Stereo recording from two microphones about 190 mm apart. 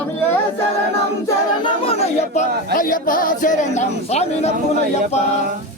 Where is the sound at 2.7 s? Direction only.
45° left (ahead or behind).